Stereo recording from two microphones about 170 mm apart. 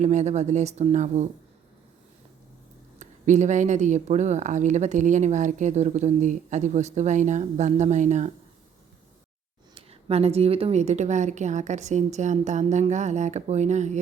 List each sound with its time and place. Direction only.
0.0 s speech: 45° right (ahead or behind)
3.0 s speech: 45° right (ahead or behind)
9.7 s speech: 35° right (ahead or behind)